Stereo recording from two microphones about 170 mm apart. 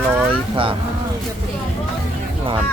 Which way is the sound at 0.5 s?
30° right (ahead or behind).